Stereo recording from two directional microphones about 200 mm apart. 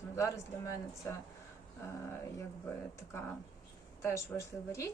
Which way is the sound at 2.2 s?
15° left (ahead or behind).